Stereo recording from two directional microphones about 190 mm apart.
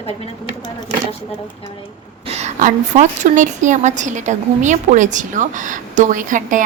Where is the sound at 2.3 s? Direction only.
35° right (ahead or behind).